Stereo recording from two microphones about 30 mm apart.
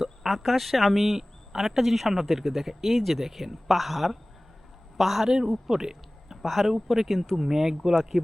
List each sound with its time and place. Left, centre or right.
0.3 s speech: centre
6.4 s speech: centre